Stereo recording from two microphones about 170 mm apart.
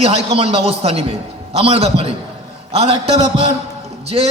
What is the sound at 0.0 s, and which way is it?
A man's voice, 35° right (ahead or behind).